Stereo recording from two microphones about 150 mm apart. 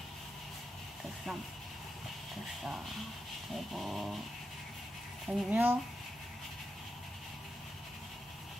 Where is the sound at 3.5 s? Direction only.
Centre (ahead or behind).